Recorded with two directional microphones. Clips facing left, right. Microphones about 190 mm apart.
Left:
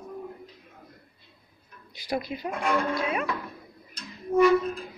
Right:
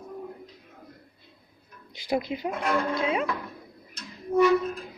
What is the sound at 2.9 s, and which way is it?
Speech, 20° right (ahead or behind).